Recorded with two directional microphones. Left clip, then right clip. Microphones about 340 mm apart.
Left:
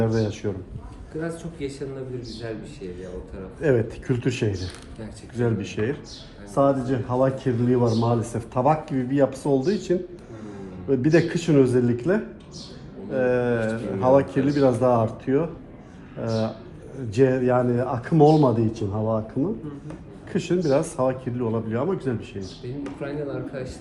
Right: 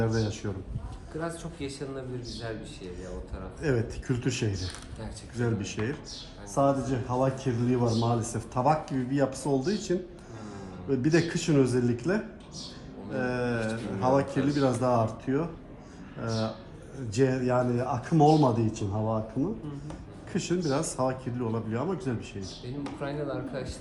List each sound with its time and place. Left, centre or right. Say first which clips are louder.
0.0 s speech: left 6 dB; centre
1.2 s speech: left 5 dB; right
3.6 s speech: left 8 dB; centre
5.5 s speech: left 5 dB; right
6.5 s speech: left 5 dB; centre
14.3 s speech: left 5 dB; right
14.5 s speech: left 7 dB; centre
22.8 s speech: left 3 dB; right